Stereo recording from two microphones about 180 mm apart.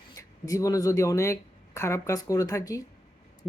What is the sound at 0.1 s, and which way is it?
Speech, 20° left (ahead or behind).